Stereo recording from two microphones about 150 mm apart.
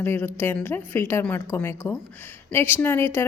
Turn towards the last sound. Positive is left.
turn(degrees=15)  # may be behind; listen again after turning